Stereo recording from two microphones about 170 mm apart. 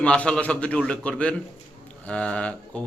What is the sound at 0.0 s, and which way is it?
A man's voice, 5° left (ahead or behind).